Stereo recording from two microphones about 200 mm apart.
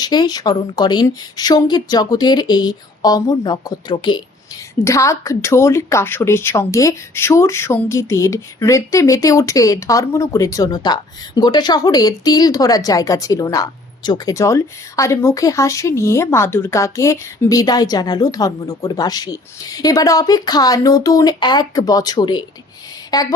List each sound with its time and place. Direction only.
0.0 s a woman's voice: 20° left (ahead or behind)